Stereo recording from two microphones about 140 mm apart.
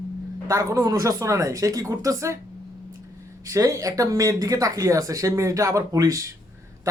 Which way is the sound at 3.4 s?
25° right (ahead or behind).